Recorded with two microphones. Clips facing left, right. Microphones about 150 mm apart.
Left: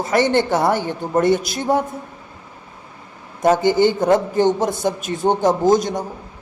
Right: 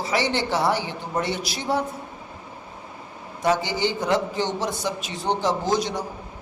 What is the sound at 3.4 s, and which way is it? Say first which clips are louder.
A man's voice: left 8 dB; 50° left (ahead or behind).